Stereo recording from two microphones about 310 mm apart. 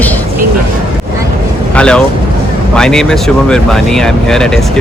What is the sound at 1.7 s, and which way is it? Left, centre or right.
Vehicle, centre.